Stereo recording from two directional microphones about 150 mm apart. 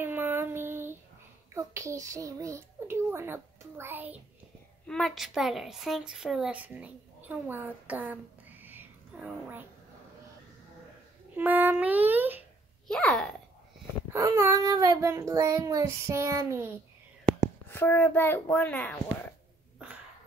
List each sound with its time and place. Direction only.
0.0 s child singing: 15° right (ahead or behind)
1.5 s a child's voice: 20° right (ahead or behind)
4.8 s a woman's voice: 5° left (ahead or behind)
11.3 s a sound: 10° right (ahead or behind)
12.8 s babbling: 5° left (ahead or behind)
14.1 s a child's voice: 20° right (ahead or behind)
17.6 s a child's voice: 15° left (ahead or behind)